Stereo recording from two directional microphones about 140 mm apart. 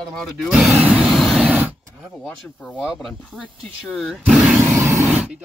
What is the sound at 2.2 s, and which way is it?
Speech, 10° left (ahead or behind).